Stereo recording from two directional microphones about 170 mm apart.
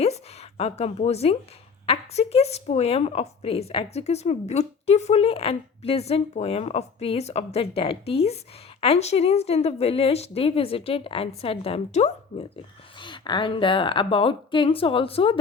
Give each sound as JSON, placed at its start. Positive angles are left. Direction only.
{"t": 0.0, "sound": "a sound", "side_deg": 35}
{"t": 1.9, "sound": "a woman's voice", "side_deg": 35}
{"t": 13.0, "sound": "a woman's voice", "side_deg": 25}